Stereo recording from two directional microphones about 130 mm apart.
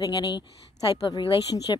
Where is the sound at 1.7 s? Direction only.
35° left (ahead or behind).